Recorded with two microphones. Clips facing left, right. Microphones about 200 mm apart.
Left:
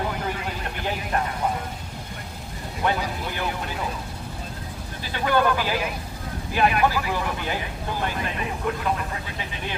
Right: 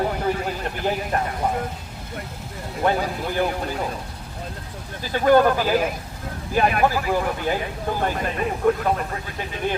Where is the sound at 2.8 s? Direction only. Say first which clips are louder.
Right 4 dB; 40° right (ahead or behind).